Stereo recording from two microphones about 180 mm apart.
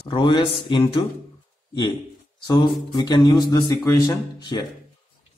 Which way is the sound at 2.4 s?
20° left (ahead or behind).